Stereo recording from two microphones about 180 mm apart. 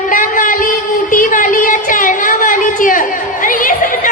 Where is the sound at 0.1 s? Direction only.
50° left (ahead or behind).